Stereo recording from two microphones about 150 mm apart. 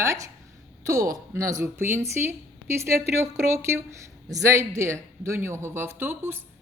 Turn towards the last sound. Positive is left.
turn(degrees=-15)  # may be behind; listen again after turning